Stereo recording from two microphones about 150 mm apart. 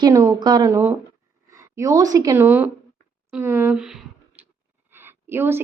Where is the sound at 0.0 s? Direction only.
20° right (ahead or behind).